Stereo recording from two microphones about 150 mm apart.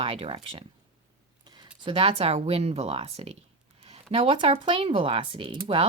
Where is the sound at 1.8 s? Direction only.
40° right (ahead or behind).